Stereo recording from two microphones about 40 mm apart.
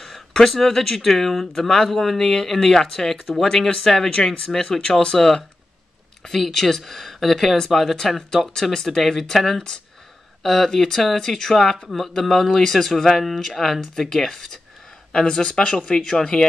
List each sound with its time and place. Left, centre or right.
0.0 s speech: centre
6.4 s speech: centre